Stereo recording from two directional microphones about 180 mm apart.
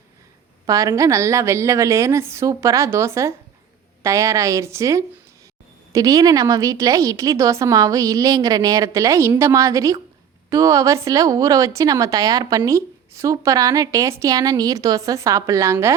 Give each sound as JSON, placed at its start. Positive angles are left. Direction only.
{"t": 0.7, "sound": "a woman's voice", "side_deg": -20}